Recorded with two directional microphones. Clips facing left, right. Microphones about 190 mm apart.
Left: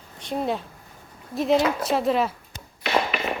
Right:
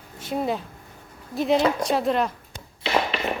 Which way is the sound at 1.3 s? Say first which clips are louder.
Even; centre (ahead or behind).